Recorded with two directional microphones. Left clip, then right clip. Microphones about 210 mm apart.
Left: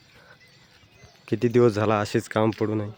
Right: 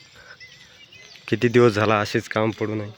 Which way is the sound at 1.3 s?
5° left (ahead or behind).